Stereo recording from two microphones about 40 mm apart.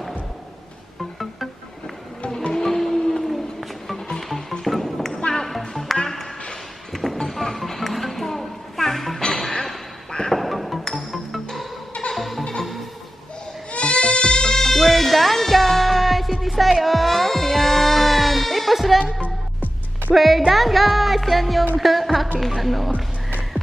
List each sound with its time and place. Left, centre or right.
2.5 s a sound: centre
4.3 s music: centre
5.1 s music: left
5.4 s music: centre
9.3 s a sound: centre
10.3 s music: centre
13.7 s goat: left
14.5 s music: centre
14.8 s music: centre